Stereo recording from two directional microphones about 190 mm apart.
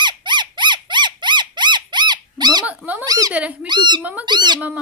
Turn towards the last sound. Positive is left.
turn(degrees=-25)  # may be behind; listen again after turning